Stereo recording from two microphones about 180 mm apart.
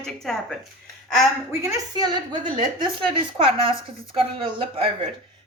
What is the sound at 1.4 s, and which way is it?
A woman's voice, 20° right (ahead or behind).